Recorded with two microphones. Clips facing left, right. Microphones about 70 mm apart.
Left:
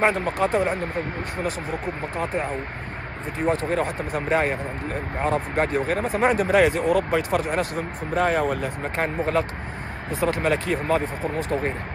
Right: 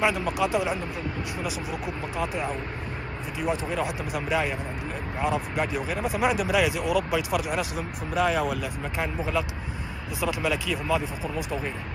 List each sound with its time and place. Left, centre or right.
0.0 s speech: left
3.6 s speech: left